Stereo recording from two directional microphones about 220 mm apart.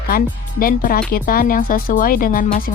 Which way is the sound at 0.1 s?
40° left (ahead or behind).